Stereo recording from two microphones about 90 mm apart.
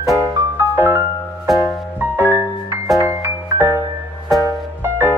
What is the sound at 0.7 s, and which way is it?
Music, 25° right (ahead or behind).